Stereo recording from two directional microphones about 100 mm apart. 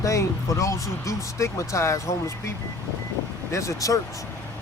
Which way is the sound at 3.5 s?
30° left (ahead or behind).